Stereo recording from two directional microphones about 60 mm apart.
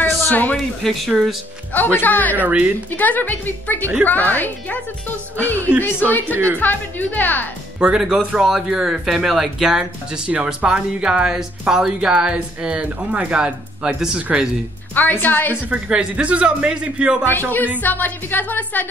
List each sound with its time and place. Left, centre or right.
0.0 s a sound: left
0.8 s speech: centre
2.0 s speech: left
2.3 s speech: right
3.0 s a woman's voice: left
5.9 s speech: left
6.3 s a woman's voice: right
6.6 s a woman's voice: left
7.8 s speech: centre
15.0 s a woman's voice: left
15.7 s speech: centre
17.2 s a woman's voice: left